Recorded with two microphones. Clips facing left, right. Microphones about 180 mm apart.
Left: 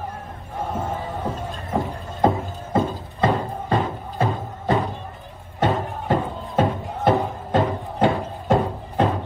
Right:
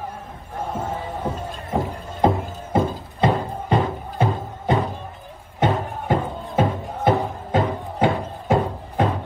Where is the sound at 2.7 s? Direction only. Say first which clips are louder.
Right 1 dB; 20° right (ahead or behind).